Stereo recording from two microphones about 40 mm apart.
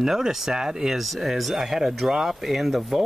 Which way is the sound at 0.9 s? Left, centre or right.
Centre.